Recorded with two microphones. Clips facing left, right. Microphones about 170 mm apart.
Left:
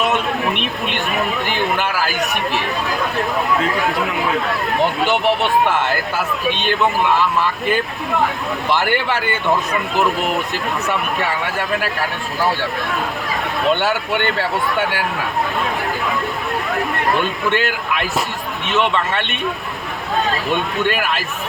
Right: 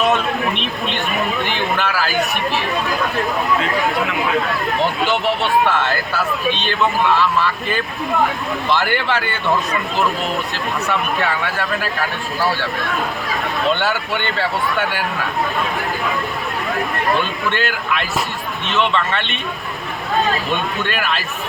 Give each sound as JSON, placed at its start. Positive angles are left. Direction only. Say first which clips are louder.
{"t": 1.7, "sound": "a man's voice", "louder": "even", "side_deg": 15}
{"t": 4.8, "sound": "speech", "louder": "left 2 dB", "side_deg": 20}
{"t": 8.7, "sound": "speech", "louder": "even", "side_deg": 15}
{"t": 11.4, "sound": "speech", "louder": "left 1 dB", "side_deg": 20}
{"t": 13.7, "sound": "speech", "louder": "left 2 dB", "side_deg": 15}
{"t": 17.5, "sound": "speech", "louder": "left 1 dB", "side_deg": 15}